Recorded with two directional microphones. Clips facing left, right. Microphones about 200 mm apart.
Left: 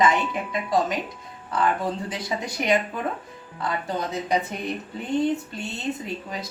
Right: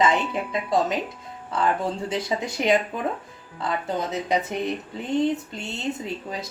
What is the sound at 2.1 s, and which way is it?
Speech, 25° right (ahead or behind).